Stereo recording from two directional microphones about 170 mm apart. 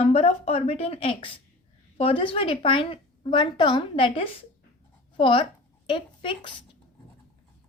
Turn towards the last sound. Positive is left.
turn(degrees=30)  # may be behind; listen again after turning